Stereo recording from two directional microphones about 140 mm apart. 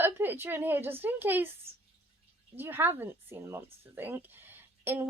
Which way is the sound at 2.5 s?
15° right (ahead or behind).